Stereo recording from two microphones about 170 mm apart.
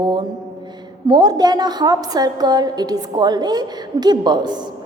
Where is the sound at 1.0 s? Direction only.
25° right (ahead or behind).